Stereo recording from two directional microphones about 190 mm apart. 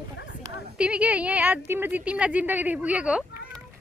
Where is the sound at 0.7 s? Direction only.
5° right (ahead or behind).